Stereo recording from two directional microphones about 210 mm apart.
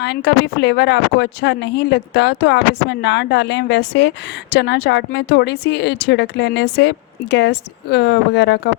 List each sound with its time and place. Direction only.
0.0 s speech: 55° left (ahead or behind)